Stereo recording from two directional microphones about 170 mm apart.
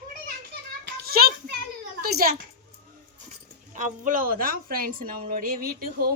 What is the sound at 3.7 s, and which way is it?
Speech, 50° right (ahead or behind).